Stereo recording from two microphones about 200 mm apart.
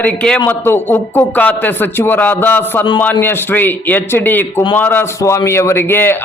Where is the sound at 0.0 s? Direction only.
5° left (ahead or behind).